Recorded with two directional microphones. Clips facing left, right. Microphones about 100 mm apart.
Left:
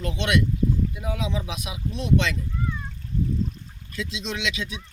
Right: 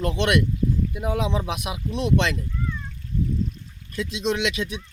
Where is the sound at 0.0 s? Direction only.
60° right (ahead or behind).